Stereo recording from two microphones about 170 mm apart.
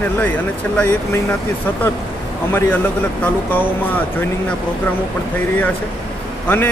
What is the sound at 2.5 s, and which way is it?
Speech, 10° left (ahead or behind).